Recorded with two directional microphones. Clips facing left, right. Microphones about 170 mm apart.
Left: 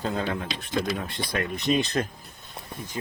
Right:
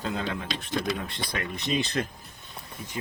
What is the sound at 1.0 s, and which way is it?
Speech, 50° left (ahead or behind).